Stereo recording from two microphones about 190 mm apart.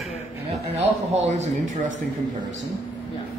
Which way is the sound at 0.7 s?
35° right (ahead or behind).